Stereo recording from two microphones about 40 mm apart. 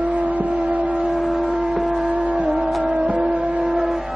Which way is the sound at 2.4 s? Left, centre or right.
Right.